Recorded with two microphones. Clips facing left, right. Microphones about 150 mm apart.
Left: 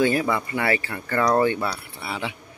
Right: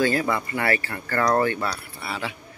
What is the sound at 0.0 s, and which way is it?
Speech, 15° left (ahead or behind).